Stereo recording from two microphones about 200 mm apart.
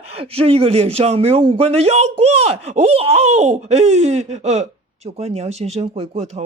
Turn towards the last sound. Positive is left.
turn(degrees=-30)  # may be behind; listen again after turning